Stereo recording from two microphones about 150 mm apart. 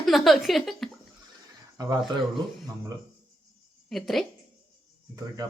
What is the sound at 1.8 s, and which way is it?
Speech, 25° right (ahead or behind).